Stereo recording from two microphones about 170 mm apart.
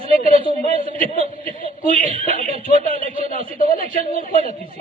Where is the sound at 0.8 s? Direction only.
55° left (ahead or behind).